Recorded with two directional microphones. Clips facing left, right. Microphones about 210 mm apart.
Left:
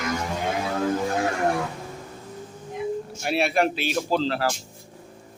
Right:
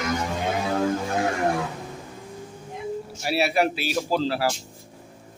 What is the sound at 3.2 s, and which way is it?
Speech, 5° right (ahead or behind).